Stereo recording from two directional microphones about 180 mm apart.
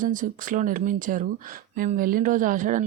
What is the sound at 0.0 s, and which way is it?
A woman's voice, 45° right (ahead or behind).